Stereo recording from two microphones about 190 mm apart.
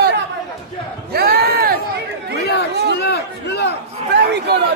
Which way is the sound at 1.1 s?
55° right (ahead or behind).